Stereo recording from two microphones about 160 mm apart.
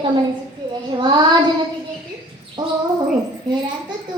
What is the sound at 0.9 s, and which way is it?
Speech, 30° right (ahead or behind).